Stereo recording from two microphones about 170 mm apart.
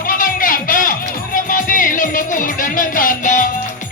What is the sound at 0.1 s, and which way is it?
Music, 55° left (ahead or behind).